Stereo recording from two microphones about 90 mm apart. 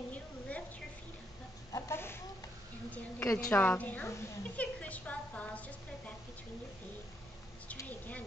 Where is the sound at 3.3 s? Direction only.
40° left (ahead or behind).